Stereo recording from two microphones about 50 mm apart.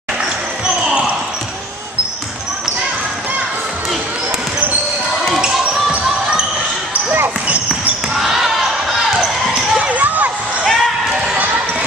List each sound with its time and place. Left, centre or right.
5.2 s basketball bounce: centre
8.1 s basketball bounce: centre
9.8 s a sound: right
10.6 s basketball bounce: centre